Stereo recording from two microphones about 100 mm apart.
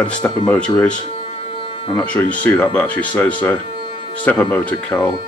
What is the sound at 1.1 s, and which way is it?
Music, 85° left.